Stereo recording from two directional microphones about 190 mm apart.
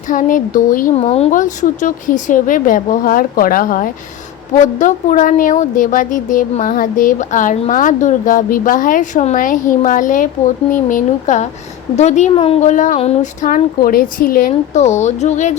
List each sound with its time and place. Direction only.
0.1 s a woman's voice: 45° left (ahead or behind)